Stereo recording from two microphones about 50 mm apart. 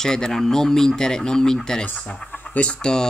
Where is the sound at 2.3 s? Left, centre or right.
Left.